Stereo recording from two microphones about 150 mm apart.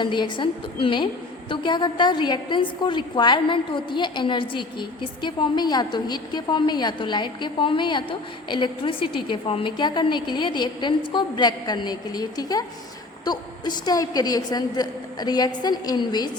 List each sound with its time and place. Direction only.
0.0 s a woman's voice: 30° left (ahead or behind)